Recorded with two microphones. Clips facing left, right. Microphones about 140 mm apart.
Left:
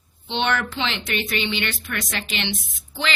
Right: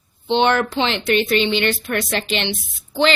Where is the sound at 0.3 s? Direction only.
35° right (ahead or behind).